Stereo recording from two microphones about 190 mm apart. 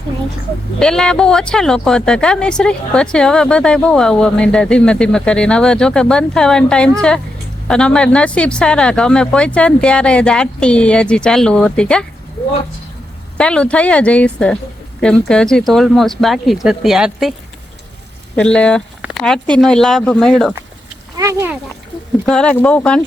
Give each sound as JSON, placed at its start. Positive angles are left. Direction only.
{"t": 0.8, "sound": "speech", "side_deg": 5}
{"t": 13.3, "sound": "speech", "side_deg": 5}
{"t": 18.3, "sound": "speech", "side_deg": 5}
{"t": 21.2, "sound": "speech", "side_deg": -15}
{"t": 22.3, "sound": "speech", "side_deg": 5}